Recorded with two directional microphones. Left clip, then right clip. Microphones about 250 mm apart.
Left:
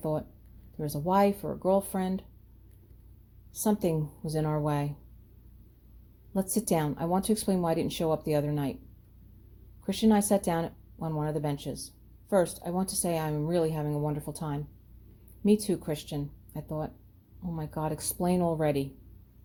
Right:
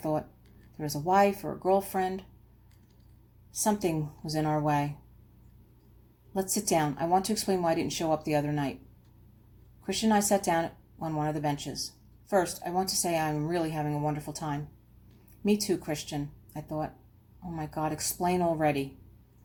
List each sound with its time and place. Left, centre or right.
0.0 s speech: left
3.6 s speech: left
6.3 s speech: left
9.8 s speech: left